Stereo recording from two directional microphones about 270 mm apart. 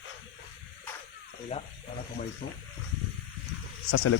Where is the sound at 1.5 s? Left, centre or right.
Left.